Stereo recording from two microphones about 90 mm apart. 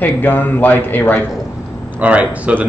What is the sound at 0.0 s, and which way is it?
Speech, 20° left (ahead or behind).